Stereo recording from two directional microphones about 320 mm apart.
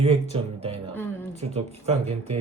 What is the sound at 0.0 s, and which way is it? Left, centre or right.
Speech, centre.